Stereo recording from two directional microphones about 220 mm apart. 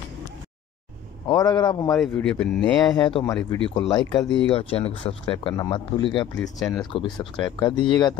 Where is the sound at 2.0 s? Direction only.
5° left (ahead or behind).